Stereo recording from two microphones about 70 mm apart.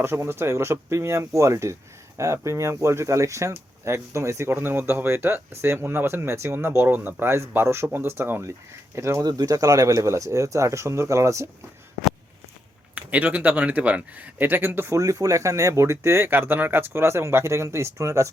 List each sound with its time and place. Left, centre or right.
0.0 s speech: right
4.5 s speech: right
9.2 s speech: right
12.9 s speech: centre
14.9 s speech: right